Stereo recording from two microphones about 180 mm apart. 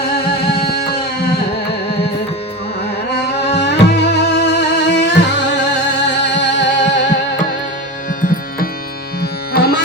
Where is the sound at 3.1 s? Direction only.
70° left (ahead or behind).